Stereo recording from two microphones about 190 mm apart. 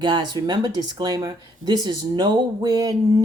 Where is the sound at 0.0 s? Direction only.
25° right (ahead or behind).